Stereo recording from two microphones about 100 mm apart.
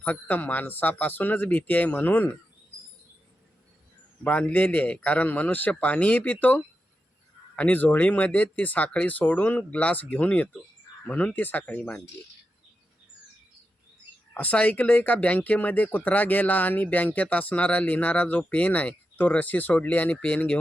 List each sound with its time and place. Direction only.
0.0 s speech: 15° left (ahead or behind)
4.2 s speech: 15° left (ahead or behind)
14.3 s speech: 15° left (ahead or behind)